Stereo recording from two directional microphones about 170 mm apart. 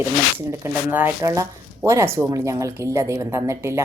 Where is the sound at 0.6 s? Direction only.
10° right (ahead or behind).